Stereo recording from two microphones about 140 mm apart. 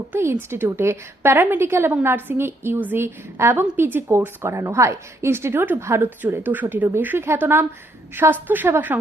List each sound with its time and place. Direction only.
0.1 s a woman's voice: 15° right (ahead or behind)